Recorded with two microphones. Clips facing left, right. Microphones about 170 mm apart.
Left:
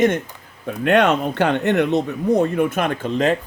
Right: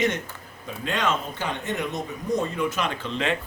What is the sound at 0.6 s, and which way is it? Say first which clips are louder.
Speech: left 10 dB; 65° left (ahead or behind).